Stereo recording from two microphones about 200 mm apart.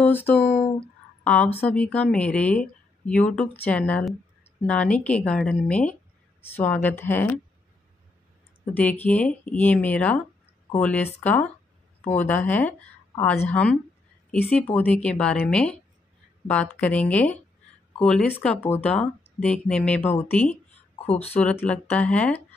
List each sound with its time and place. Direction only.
0.0 s a woman's voice: 10° left (ahead or behind)
9.0 s a woman's voice: 5° left (ahead or behind)
16.8 s a woman's voice: 5° left (ahead or behind)
21.0 s speech: 30° left (ahead or behind)
21.4 s a woman's voice: 5° left (ahead or behind)